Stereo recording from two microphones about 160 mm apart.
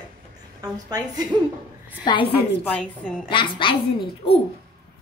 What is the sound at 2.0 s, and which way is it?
Speech, 30° left (ahead or behind).